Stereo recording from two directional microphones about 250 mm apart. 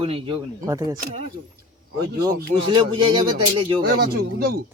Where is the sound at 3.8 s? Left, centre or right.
Right.